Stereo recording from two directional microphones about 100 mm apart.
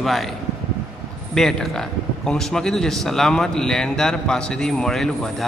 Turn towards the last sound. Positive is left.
turn(degrees=5)  # may be behind; listen again after turning